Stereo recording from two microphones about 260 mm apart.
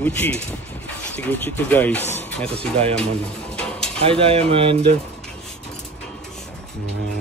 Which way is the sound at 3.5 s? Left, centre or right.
Centre.